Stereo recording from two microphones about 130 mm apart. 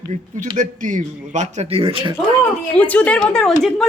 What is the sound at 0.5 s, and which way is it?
A man's voice, 80° right.